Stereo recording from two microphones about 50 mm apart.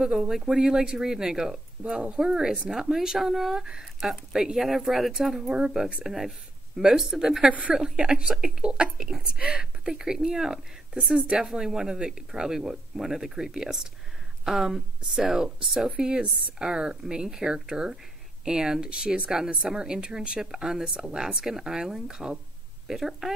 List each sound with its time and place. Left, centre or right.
0.0 s speech: centre